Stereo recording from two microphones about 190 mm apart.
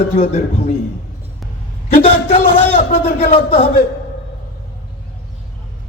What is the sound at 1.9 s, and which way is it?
A man's voice, 45° left (ahead or behind).